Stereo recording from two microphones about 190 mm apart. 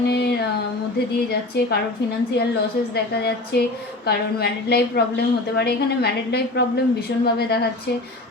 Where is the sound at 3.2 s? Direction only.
60° left (ahead or behind).